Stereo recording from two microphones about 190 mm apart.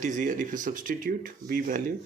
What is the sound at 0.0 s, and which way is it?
Speech, 40° right (ahead or behind).